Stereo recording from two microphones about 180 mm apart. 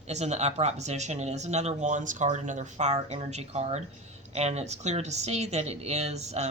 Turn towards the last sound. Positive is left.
turn(degrees=-40)  # may be behind; listen again after turning